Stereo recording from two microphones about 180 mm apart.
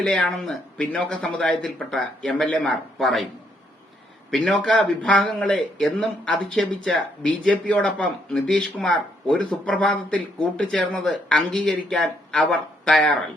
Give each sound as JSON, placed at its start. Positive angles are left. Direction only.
{"t": 0.0, "sound": "a man's voice", "side_deg": 5}
{"t": 4.3, "sound": "a man's voice", "side_deg": 0}